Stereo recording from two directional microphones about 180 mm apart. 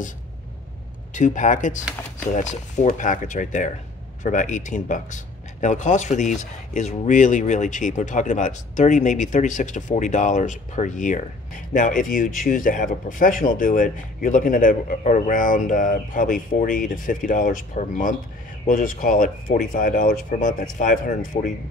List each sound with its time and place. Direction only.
1.1 s speech: 45° left (ahead or behind)